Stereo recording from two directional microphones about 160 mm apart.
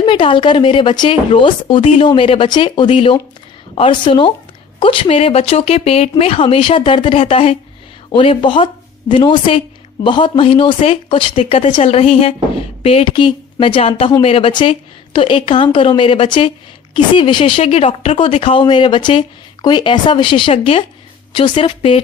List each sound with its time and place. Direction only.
0.0 s a woman's voice: 30° left (ahead or behind)